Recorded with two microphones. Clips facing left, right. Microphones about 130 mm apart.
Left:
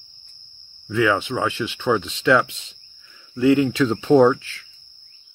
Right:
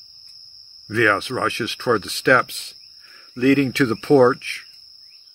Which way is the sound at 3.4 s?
15° left (ahead or behind).